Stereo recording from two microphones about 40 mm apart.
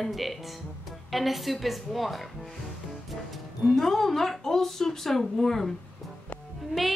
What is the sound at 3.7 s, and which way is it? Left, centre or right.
Speech, centre.